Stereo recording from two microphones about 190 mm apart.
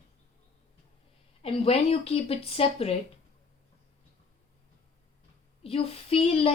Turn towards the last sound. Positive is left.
turn(degrees=30)  # may be behind; listen again after turning